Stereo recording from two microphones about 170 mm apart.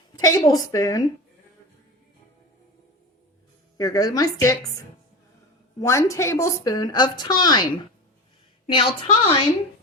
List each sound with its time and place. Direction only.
0.2 s a woman's voice: 20° left (ahead or behind)
3.8 s a woman's voice: 20° left (ahead or behind)
5.8 s a woman's voice: 15° left (ahead or behind); by 9.3 s 30° left (ahead or behind)